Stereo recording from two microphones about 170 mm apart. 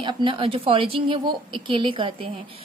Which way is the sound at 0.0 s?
30° right (ahead or behind).